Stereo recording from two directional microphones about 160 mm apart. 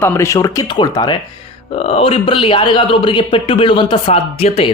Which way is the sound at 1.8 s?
40° left (ahead or behind).